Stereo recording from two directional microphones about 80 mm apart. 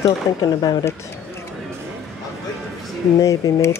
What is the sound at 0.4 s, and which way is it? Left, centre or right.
Speech, left.